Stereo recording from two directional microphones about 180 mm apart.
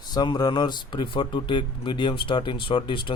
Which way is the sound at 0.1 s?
20° left (ahead or behind).